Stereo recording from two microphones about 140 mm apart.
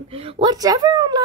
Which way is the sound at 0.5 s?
25° right (ahead or behind).